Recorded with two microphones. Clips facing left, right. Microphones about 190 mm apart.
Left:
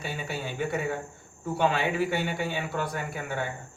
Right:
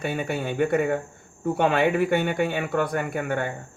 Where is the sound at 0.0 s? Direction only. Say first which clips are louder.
Right 7 dB; 55° right (ahead or behind).